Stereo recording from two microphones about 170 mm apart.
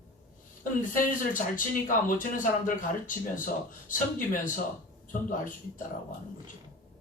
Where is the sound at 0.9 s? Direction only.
50° left (ahead or behind).